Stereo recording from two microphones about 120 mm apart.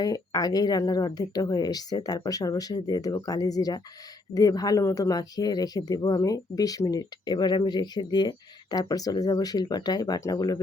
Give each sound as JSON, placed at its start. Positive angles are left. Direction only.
{"t": 0.0, "sound": "speech", "side_deg": 35}